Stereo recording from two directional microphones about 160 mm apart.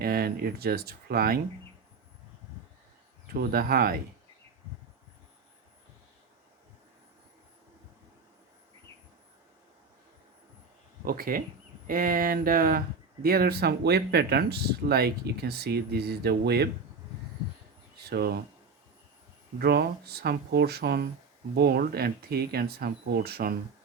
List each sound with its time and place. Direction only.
0.0 s speech: 70° right (ahead or behind)
3.3 s speech: 70° right (ahead or behind)
11.0 s speech: 65° right (ahead or behind); by 16.6 s 90° right
18.0 s speech: 80° right
19.5 s speech: 85° right